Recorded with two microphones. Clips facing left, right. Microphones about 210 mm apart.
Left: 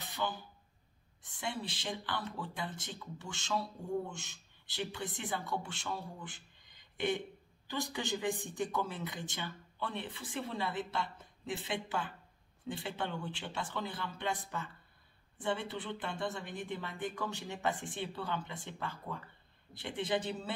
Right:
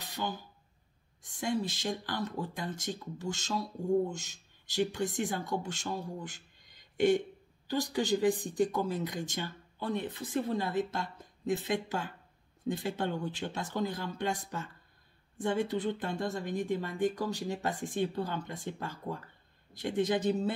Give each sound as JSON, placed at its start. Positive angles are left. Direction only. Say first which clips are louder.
{"t": 1.4, "sound": "speech", "louder": "right 7 dB", "side_deg": -45}
{"t": 7.6, "sound": "speech", "louder": "right 7 dB", "side_deg": -40}